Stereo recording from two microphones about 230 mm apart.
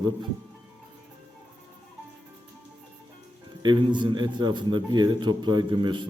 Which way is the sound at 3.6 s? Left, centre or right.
Centre.